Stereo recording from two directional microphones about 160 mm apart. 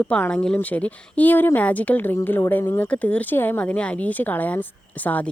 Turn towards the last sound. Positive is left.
turn(degrees=10)  # may be behind; listen again after turning